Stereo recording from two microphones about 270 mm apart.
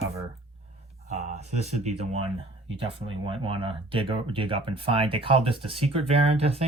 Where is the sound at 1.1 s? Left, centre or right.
Right.